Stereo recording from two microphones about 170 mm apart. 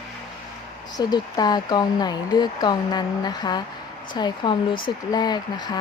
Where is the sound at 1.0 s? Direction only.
25° left (ahead or behind).